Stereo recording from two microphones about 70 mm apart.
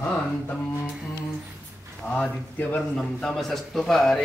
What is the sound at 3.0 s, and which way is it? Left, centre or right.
A man's voice, centre.